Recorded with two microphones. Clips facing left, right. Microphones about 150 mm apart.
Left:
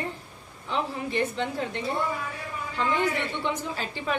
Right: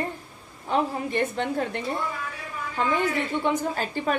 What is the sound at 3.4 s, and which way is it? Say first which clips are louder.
Speech: right 5 dB; 45° right (ahead or behind).